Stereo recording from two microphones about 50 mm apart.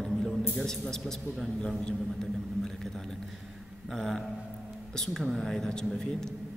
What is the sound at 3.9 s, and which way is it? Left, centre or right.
A man's voice, centre.